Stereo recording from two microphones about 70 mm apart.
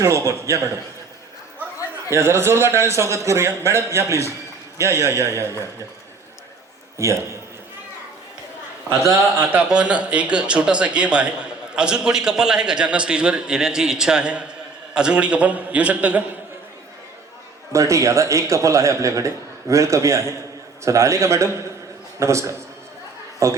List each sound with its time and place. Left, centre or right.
0.0 s a man's voice: right
2.0 s a man's voice: right
7.0 s a man's voice: right
9.6 s a man's voice: centre
17.7 s a man's voice: right